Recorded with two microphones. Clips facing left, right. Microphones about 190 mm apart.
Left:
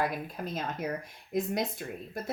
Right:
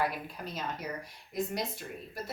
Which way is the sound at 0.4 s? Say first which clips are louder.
Left 3 dB; 50° left (ahead or behind).